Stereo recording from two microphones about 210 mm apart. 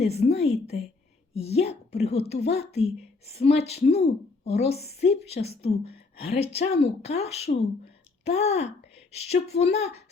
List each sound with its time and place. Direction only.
0.0 s a woman's voice: 30° left (ahead or behind)